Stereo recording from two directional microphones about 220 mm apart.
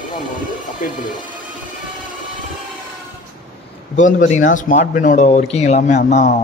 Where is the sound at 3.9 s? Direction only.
35° left (ahead or behind).